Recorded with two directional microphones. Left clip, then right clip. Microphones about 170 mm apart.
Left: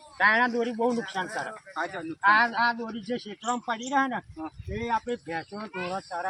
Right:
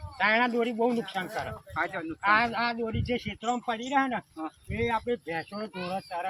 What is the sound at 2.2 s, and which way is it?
A man's voice, 20° right (ahead or behind).